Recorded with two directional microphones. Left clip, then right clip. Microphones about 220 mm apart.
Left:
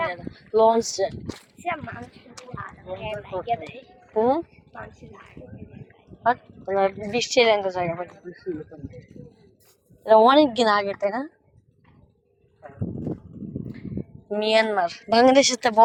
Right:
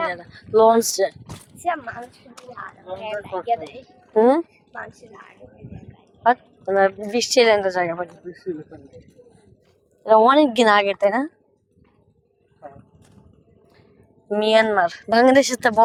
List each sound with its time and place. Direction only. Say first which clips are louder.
0.0 s a woman's voice: right 2 dB; 30° right (ahead or behind)
4.1 s speech: right 5 dB; 40° right (ahead or behind)
7.0 s a woman's voice: right 3 dB; 25° right (ahead or behind)
10.0 s a woman's voice: right 1 dB; 10° right (ahead or behind)
10.5 s a woman's voice: right 5 dB; 35° right (ahead or behind)
14.3 s speech: right 4 dB; 20° right (ahead or behind)